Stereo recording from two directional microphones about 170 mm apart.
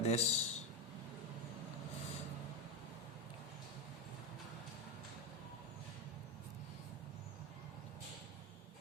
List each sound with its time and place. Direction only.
0.0 s a man's voice: 40° left (ahead or behind)